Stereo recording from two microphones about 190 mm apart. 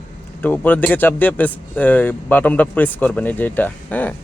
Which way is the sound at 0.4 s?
10° left (ahead or behind).